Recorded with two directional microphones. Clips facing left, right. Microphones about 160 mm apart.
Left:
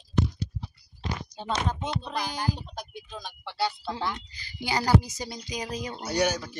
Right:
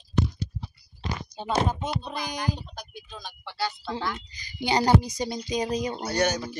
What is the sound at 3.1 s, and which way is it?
Speech, 20° left (ahead or behind).